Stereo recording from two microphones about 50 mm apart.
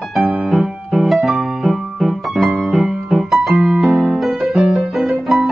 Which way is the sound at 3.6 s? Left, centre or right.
Right.